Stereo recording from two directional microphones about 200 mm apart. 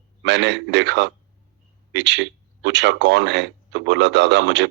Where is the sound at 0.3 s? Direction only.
60° right (ahead or behind).